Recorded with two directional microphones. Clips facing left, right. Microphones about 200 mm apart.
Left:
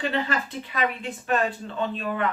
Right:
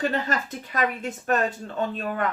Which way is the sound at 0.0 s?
45° right (ahead or behind).